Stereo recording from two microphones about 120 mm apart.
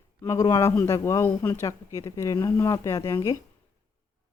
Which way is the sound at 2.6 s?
30° left (ahead or behind).